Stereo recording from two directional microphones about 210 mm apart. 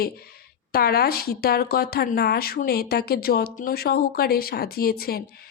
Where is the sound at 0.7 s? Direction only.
45° left (ahead or behind).